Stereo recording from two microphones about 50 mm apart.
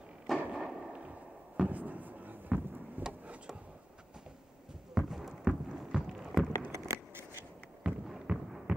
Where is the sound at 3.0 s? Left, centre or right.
Right.